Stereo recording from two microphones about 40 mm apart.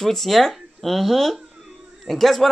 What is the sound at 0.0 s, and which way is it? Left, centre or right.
Speech, centre.